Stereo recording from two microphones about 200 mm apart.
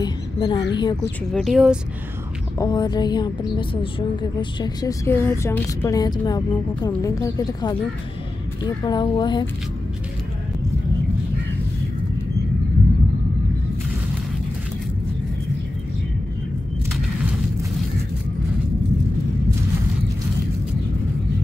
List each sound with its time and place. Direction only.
0.0 s a sound: 20° left (ahead or behind)
0.7 s a woman's voice: 20° left (ahead or behind)
1.3 s speech: centre (ahead or behind)
2.6 s a woman's voice: 20° left (ahead or behind)